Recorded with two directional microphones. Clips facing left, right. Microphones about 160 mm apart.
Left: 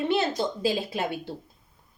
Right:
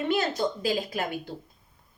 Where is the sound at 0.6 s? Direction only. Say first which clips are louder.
Left 1 dB; 25° left (ahead or behind).